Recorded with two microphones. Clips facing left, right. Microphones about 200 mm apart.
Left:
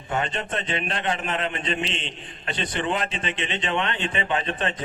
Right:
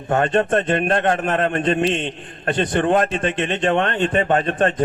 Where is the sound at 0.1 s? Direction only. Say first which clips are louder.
Right 10 dB; 50° right (ahead or behind).